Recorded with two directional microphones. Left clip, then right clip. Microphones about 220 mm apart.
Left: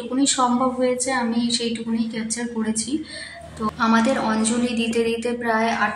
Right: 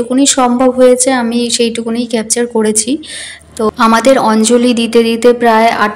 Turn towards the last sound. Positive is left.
turn(degrees=-45)  # may be behind; listen again after turning